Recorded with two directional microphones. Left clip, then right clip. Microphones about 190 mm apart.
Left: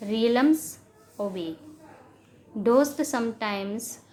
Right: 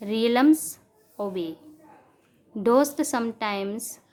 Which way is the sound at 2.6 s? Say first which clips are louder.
Right 1 dB; 30° right (ahead or behind).